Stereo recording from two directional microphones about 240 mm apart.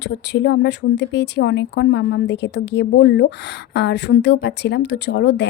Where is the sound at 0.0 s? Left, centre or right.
Left.